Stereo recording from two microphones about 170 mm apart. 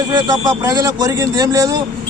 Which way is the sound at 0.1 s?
20° right (ahead or behind).